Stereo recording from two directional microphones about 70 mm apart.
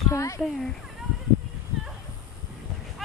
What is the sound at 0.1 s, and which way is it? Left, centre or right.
Speech, left.